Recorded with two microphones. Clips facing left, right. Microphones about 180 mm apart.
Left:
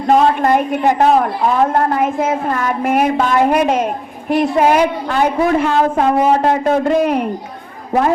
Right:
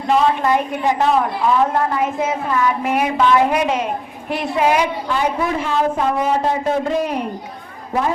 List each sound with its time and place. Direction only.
0.1 s a woman's voice: 50° left (ahead or behind)